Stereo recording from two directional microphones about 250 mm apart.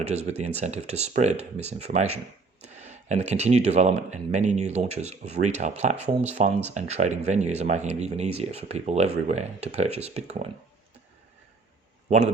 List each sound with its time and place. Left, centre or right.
0.0 s speech: right